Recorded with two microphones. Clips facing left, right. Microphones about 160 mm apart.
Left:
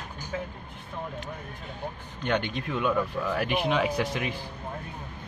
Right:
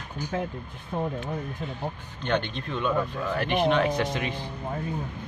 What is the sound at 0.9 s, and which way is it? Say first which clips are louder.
Speech: right 8 dB; 45° right (ahead or behind).